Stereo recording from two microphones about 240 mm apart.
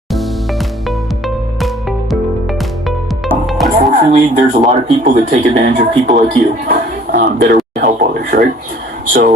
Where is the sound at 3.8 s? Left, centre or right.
Right.